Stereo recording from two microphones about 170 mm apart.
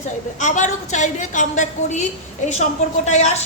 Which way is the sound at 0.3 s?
45° left (ahead or behind).